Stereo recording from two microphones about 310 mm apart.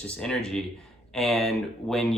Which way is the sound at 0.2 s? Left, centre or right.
Centre.